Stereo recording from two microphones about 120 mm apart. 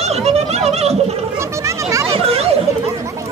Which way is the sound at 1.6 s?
25° right (ahead or behind).